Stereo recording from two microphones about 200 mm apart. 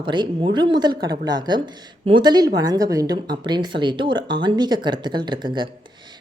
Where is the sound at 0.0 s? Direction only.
25° right (ahead or behind).